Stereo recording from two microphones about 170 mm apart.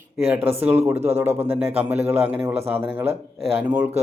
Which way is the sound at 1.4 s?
10° right (ahead or behind).